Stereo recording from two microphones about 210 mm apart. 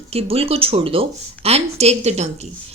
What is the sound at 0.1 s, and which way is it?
Speech, 30° right (ahead or behind).